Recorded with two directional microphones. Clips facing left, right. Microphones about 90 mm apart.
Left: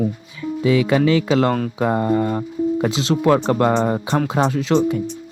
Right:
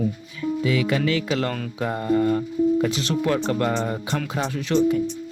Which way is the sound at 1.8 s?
85° left.